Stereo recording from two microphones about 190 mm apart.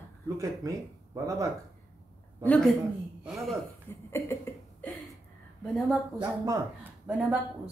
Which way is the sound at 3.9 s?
15° left (ahead or behind).